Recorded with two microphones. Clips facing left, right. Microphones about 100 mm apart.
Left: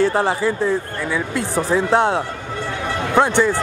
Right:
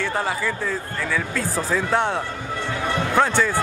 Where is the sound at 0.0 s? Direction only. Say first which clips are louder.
Left 7 dB; 30° left (ahead or behind).